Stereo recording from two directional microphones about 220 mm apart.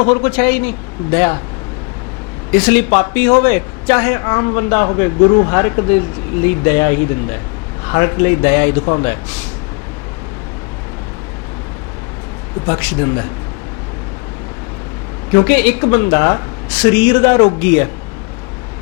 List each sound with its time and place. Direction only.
0.1 s speech: 10° left (ahead or behind)
2.5 s speech: 10° left (ahead or behind)
12.6 s speech: 15° left (ahead or behind)
15.3 s speech: 10° left (ahead or behind)